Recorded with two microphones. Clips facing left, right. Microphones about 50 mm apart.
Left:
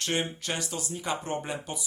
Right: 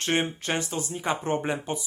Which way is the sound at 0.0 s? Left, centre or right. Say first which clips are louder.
Right 4 dB; right.